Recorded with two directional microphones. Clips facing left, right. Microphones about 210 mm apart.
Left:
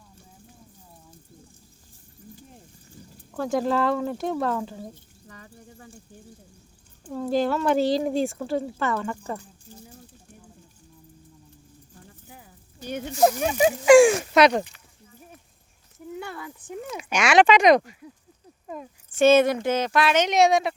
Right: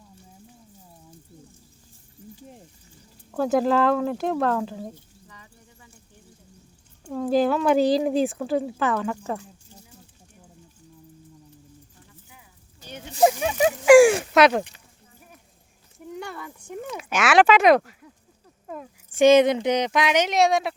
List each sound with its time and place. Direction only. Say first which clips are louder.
3.3 s speech: right 3 dB; 5° right (ahead or behind)
5.3 s bird: left 7 dB; 50° left (ahead or behind)
7.3 s speech: right 3 dB; 5° right (ahead or behind)
12.0 s a sound: left 5 dB; 50° left (ahead or behind)
13.2 s speech: even; centre (ahead or behind)
16.2 s speech: even; centre (ahead or behind)
19.1 s speech: right 2 dB; 15° right (ahead or behind)
20.2 s speech: left 1 dB; centre (ahead or behind)